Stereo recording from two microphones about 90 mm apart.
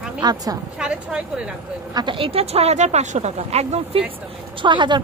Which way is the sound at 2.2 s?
90° right.